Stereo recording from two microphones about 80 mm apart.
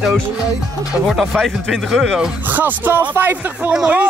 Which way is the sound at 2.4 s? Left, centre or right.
Right.